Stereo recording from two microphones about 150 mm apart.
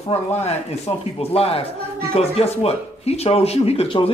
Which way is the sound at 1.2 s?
40° left (ahead or behind).